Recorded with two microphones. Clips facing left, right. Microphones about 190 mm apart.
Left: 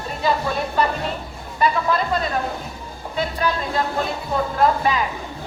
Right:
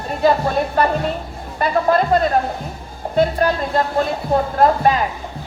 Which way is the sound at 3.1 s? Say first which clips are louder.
Right 7 dB; 50° right (ahead or behind).